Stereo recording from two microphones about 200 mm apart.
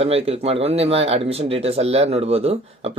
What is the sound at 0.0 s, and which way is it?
Speech, 30° right (ahead or behind).